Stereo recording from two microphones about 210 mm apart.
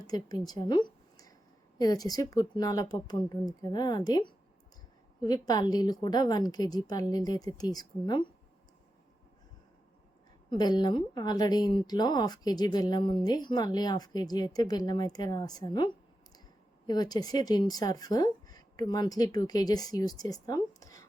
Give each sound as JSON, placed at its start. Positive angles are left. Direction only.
{"t": 0.1, "sound": "a woman's voice", "side_deg": 20}
{"t": 10.5, "sound": "a woman's voice", "side_deg": 20}